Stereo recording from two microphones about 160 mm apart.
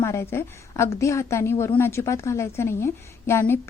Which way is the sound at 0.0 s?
15° left (ahead or behind).